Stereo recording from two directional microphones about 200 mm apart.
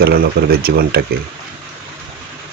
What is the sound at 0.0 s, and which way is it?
Speech, 50° right (ahead or behind).